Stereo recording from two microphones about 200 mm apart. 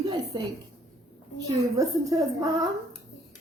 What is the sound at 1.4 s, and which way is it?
A woman's voice, 15° right (ahead or behind).